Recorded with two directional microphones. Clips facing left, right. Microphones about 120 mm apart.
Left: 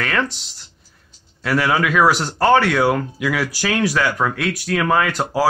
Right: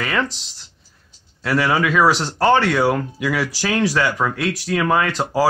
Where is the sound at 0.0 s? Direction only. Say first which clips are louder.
Even; centre (ahead or behind).